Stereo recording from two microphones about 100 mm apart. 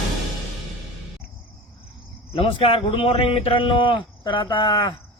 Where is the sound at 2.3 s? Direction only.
65° left (ahead or behind).